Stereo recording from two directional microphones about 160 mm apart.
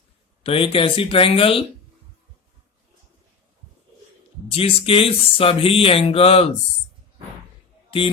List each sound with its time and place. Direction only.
0.4 s speech: 35° left (ahead or behind)
4.5 s speech: 35° left (ahead or behind)
7.9 s speech: 35° left (ahead or behind)